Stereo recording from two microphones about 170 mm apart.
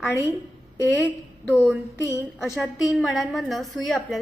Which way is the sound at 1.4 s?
15° left (ahead or behind).